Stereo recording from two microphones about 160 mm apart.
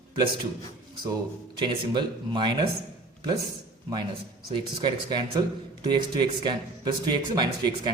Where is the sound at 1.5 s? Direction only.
30° right (ahead or behind).